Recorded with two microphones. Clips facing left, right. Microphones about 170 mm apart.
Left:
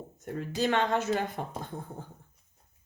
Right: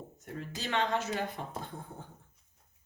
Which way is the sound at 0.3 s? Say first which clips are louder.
Left 6 dB; 50° left (ahead or behind).